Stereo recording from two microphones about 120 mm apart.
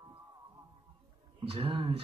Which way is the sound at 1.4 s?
50° right (ahead or behind).